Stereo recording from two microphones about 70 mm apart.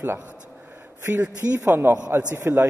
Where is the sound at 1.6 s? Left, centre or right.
Right.